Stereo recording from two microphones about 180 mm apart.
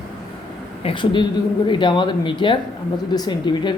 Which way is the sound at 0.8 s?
25° left (ahead or behind).